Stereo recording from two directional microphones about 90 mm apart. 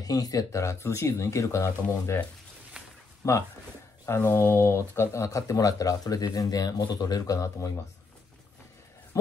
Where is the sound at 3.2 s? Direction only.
35° left (ahead or behind).